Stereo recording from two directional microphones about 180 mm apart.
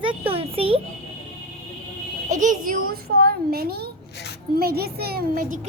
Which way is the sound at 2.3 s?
45° right (ahead or behind).